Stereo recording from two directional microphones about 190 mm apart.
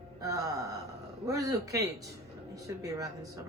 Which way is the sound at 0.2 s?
20° right (ahead or behind).